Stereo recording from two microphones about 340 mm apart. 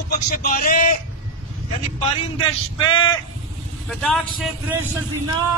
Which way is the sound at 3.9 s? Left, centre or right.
Centre.